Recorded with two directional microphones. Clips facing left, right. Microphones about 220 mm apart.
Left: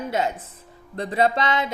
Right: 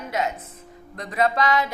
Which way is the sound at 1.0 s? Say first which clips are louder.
Left 1 dB; 30° left (ahead or behind).